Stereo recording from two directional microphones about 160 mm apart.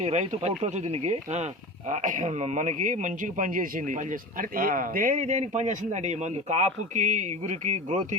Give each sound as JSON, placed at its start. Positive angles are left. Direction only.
{"t": 0.0, "sound": "a man's voice", "side_deg": -45}